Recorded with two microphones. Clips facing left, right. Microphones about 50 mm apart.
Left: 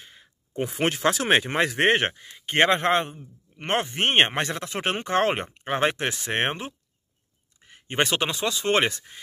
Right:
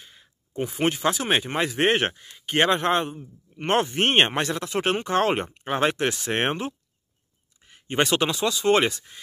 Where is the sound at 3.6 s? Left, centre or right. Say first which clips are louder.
Right 3 dB; centre.